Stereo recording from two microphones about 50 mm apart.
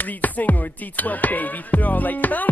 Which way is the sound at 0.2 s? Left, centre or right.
Left.